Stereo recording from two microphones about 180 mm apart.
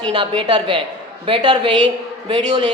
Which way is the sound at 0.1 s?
25° right (ahead or behind).